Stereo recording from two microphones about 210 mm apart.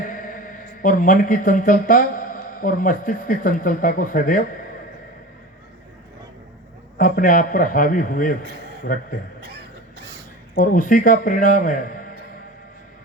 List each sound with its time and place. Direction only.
0.0 s speech: 40° left (ahead or behind)
7.0 s a man's voice: 40° left (ahead or behind)
10.5 s a man's voice: 40° left (ahead or behind)